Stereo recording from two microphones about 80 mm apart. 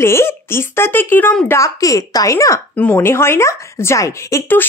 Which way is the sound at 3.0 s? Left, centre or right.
Left.